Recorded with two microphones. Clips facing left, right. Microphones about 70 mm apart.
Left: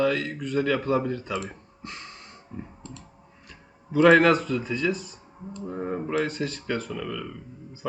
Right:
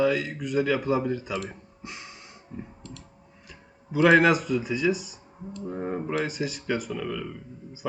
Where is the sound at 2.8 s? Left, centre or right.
Left.